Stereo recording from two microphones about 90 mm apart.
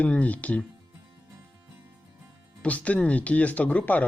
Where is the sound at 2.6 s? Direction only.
15° left (ahead or behind).